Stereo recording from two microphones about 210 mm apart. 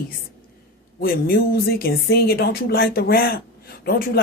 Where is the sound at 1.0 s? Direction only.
45° left (ahead or behind).